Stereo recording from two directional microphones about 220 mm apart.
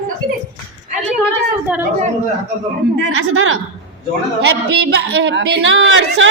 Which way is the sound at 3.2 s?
65° right (ahead or behind).